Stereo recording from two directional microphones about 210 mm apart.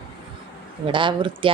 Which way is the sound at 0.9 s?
25° right (ahead or behind).